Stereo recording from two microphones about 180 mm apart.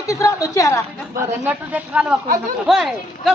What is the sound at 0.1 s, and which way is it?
Speech, 15° left (ahead or behind).